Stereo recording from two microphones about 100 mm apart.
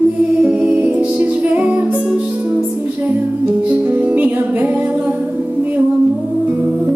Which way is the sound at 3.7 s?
15° right (ahead or behind).